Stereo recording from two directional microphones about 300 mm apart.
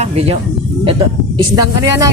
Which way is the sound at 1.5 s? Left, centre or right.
Centre.